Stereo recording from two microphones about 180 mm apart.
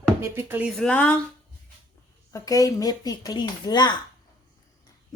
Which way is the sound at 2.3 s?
20° left (ahead or behind).